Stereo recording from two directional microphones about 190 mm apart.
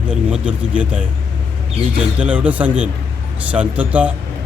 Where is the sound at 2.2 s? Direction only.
5° right (ahead or behind).